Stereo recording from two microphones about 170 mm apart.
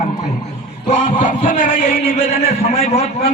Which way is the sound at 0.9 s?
50° left (ahead or behind).